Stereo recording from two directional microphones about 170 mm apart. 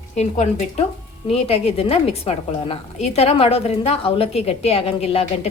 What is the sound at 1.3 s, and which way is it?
A woman's voice, 35° left (ahead or behind).